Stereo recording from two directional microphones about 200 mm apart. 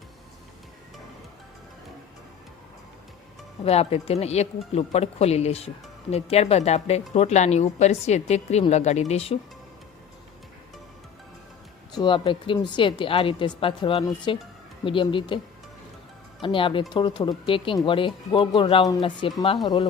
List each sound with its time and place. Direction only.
3.6 s speech: 30° left (ahead or behind)
11.9 s a woman's voice: 25° left (ahead or behind)
16.4 s a woman's voice: 25° left (ahead or behind)